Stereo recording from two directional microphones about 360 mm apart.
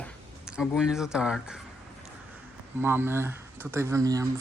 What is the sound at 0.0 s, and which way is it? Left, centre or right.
Speech, centre.